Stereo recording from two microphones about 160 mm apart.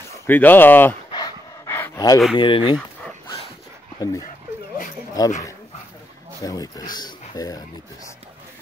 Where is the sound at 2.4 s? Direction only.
30° left (ahead or behind).